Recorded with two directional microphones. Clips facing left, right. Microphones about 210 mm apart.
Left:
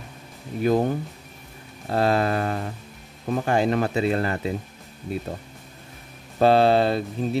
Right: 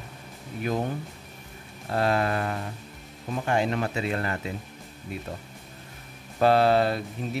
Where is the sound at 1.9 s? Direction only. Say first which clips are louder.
Left 3 dB; 30° left (ahead or behind).